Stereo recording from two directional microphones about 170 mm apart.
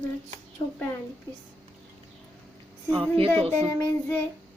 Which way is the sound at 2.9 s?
30° right (ahead or behind).